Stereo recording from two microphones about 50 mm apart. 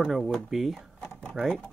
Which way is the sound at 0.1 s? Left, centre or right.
Centre.